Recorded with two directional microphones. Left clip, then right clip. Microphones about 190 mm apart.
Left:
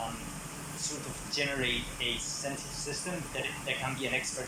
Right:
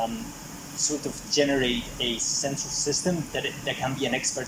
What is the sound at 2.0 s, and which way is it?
Speech, 55° right (ahead or behind).